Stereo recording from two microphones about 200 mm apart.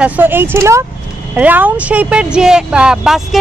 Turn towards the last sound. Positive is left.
turn(degrees=0)  # may be behind; listen again after turning